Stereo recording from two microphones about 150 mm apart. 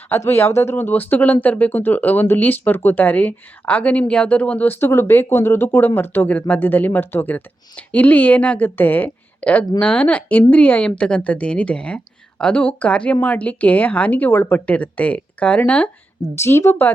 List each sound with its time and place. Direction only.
0.3 s speech: 15° left (ahead or behind)